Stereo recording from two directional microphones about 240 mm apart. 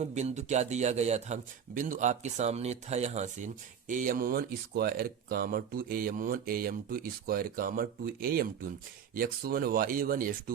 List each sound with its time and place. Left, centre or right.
0.0 s speech: right